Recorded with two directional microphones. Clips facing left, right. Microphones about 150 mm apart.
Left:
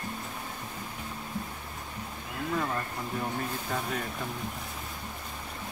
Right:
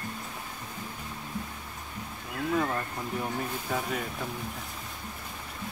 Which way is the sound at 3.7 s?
5° right (ahead or behind).